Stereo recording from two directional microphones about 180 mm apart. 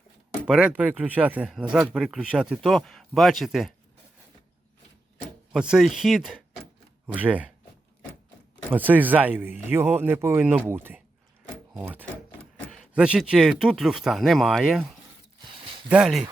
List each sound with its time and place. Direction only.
0.4 s speech: 5° right (ahead or behind)
5.5 s speech: 5° right (ahead or behind)
8.7 s speech: 10° right (ahead or behind)
15.4 s a sound: 25° right (ahead or behind)
15.9 s speech: 5° right (ahead or behind)